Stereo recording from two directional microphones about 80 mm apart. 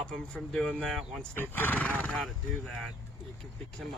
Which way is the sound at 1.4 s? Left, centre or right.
Left.